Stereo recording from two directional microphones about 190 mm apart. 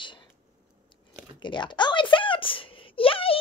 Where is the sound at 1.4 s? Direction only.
25° left (ahead or behind).